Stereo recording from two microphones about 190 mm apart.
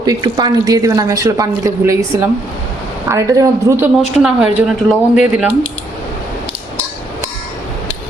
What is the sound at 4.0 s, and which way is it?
Speech, centre (ahead or behind).